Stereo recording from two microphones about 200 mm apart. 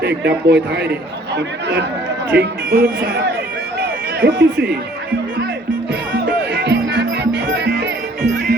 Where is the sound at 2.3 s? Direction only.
55° right (ahead or behind).